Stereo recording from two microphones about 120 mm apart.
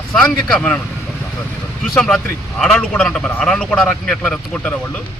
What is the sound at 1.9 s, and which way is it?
A man's voice, 5° left (ahead or behind).